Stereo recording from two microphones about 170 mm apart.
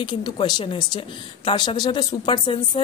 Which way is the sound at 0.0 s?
25° left (ahead or behind).